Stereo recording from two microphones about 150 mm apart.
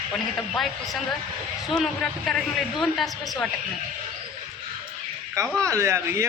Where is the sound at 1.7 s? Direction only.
5° left (ahead or behind).